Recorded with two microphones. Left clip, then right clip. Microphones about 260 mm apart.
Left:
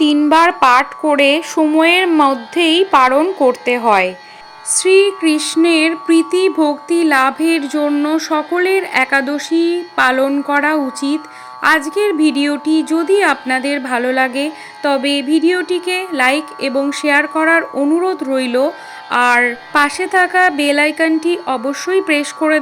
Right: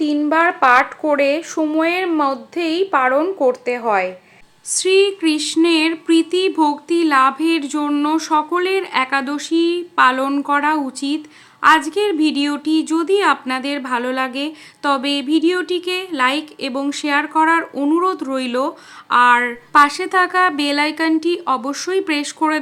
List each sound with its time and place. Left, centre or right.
0.0 s speech: left
4.7 s a woman's voice: centre